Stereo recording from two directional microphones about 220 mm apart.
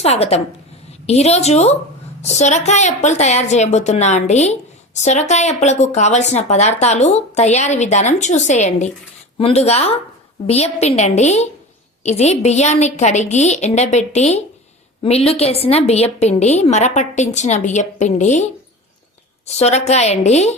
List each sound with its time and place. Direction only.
0.0 s a woman's voice: 30° left (ahead or behind)
19.5 s speech: 30° left (ahead or behind)